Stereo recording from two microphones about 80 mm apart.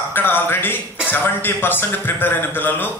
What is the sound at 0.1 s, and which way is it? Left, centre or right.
A man's voice, left.